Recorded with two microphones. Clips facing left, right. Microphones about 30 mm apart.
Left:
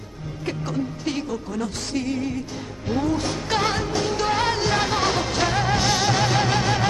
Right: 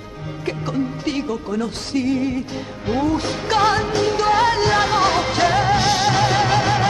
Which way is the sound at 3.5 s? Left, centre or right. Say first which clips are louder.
Right 6 dB; centre.